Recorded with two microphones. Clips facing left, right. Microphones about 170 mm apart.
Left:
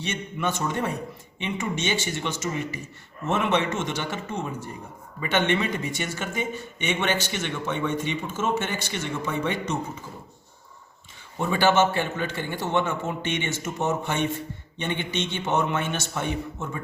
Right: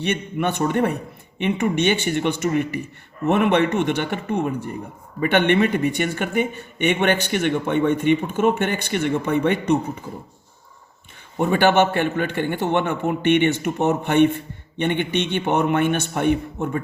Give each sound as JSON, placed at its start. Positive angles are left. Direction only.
{"t": 0.0, "sound": "a man's voice", "side_deg": -60}
{"t": 11.3, "sound": "a man's voice", "side_deg": -60}